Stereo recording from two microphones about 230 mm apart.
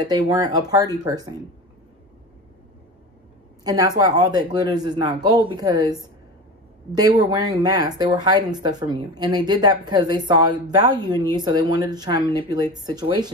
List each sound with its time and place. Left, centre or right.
0.0 s speech: centre
3.6 s speech: centre